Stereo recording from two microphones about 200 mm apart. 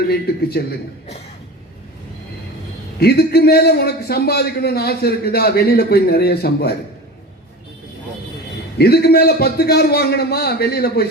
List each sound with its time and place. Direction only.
0.1 s a man's voice: 50° left (ahead or behind)
3.0 s a man's voice: 55° left (ahead or behind)
8.8 s a man's voice: 50° left (ahead or behind)